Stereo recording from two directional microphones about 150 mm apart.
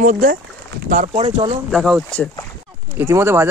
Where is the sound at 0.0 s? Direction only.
65° right (ahead or behind); by 1.4 s 50° right (ahead or behind).